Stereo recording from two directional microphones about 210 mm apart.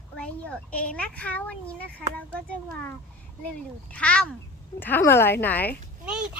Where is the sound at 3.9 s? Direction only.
5° left (ahead or behind).